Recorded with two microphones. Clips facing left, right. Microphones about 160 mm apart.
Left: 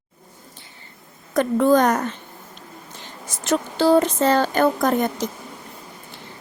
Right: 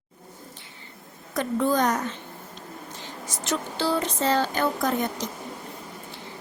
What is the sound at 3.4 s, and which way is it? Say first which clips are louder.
A woman's voice: left 8 dB; 50° left (ahead or behind).